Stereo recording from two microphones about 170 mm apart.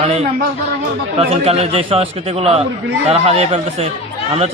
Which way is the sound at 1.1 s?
35° right (ahead or behind).